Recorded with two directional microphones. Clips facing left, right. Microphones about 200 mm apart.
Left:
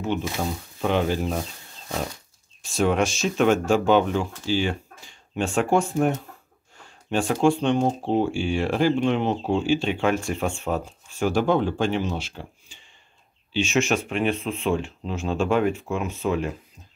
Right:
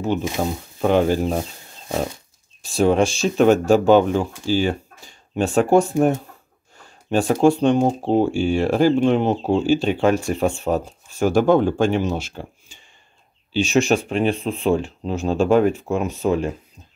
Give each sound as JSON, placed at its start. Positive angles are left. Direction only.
{"t": 0.4, "sound": "speech", "side_deg": -40}
{"t": 2.6, "sound": "speech", "side_deg": -35}